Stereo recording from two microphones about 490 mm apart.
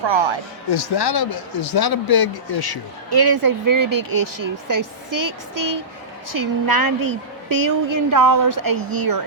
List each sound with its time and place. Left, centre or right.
0.0 s speech: right
0.7 s speech: left
3.1 s a woman's voice: right